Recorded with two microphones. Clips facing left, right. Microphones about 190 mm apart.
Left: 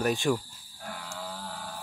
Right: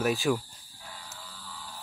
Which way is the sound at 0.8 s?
60° left (ahead or behind).